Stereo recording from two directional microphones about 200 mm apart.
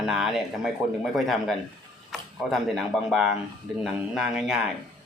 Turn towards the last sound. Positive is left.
turn(degrees=0)  # may be behind; listen again after turning